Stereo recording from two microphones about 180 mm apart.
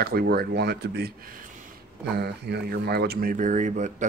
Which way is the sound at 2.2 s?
65° right (ahead or behind).